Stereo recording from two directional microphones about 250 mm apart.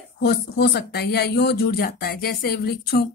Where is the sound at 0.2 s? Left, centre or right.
Left.